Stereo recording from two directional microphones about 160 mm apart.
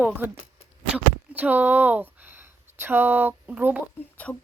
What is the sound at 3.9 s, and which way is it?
Speech, 10° left (ahead or behind).